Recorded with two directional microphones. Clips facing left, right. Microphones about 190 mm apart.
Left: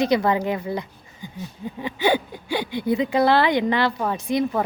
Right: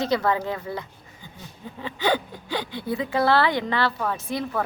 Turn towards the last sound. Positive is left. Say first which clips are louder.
# left 5 dB
turn(degrees=15)  # may be behind; listen again after turning